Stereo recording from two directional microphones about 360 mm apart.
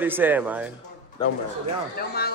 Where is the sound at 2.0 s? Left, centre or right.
Left.